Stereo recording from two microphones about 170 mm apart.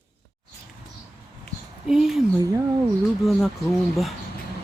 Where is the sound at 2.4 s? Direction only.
20° right (ahead or behind).